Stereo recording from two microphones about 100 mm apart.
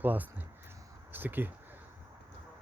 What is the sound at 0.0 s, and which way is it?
Speech, 20° right (ahead or behind).